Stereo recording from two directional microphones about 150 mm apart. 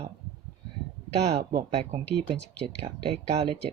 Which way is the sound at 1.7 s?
40° right (ahead or behind).